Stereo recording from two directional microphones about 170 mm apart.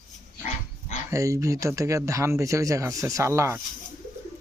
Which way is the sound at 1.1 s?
20° right (ahead or behind).